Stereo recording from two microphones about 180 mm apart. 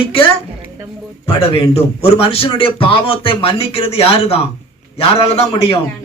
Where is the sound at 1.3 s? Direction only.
30° left (ahead or behind).